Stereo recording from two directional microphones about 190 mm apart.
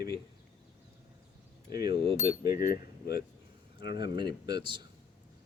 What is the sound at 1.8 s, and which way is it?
Speech, 25° right (ahead or behind).